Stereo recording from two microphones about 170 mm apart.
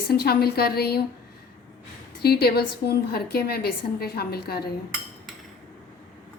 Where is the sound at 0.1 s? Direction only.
65° left (ahead or behind).